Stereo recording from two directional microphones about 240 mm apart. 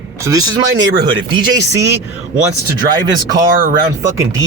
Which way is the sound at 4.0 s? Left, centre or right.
Centre.